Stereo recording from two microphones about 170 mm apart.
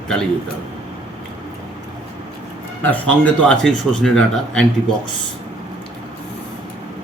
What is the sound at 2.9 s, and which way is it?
A man's voice, 10° left (ahead or behind).